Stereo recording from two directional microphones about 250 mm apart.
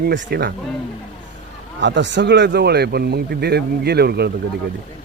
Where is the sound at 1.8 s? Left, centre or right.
Right.